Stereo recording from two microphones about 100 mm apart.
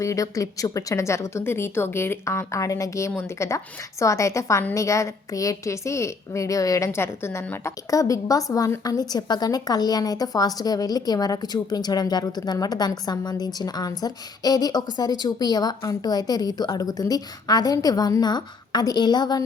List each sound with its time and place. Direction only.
0.0 s a woman's voice: 35° left (ahead or behind)